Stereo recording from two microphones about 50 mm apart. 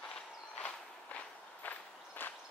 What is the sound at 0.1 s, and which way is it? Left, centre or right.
Walk, centre.